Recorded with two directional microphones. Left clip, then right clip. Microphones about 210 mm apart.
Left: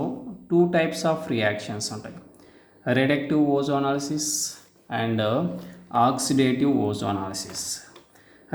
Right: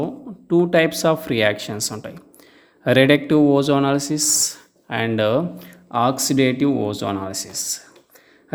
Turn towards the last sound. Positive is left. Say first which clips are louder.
# right 5 dB
turn(degrees=-25)  # may be behind; listen again after turning